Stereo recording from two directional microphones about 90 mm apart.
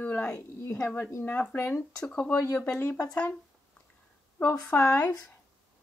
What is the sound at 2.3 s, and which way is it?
Speech, 35° left (ahead or behind).